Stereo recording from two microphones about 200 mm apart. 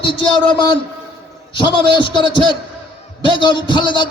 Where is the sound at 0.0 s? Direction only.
25° left (ahead or behind).